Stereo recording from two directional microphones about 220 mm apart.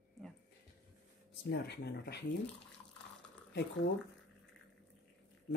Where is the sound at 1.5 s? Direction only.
50° left (ahead or behind).